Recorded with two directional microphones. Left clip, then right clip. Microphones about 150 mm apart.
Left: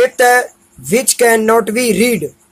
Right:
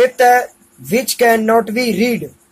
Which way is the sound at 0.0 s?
30° left (ahead or behind).